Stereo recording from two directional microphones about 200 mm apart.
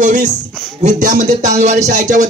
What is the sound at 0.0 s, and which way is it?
Speech, 40° right (ahead or behind).